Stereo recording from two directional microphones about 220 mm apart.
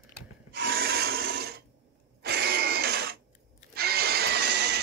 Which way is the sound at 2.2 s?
45° right (ahead or behind).